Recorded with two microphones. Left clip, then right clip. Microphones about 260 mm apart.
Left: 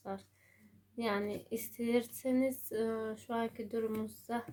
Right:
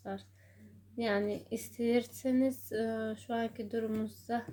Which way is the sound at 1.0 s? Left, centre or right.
Left.